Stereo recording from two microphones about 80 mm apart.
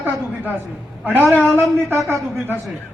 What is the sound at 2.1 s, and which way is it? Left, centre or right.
Speech, right.